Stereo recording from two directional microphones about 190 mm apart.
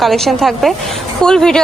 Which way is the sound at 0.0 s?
Centre (ahead or behind).